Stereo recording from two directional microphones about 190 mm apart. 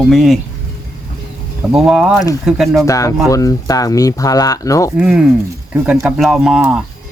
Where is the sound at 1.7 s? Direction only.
Centre (ahead or behind).